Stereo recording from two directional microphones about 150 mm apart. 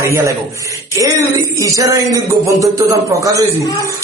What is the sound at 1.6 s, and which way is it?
A man's voice, 20° right (ahead or behind).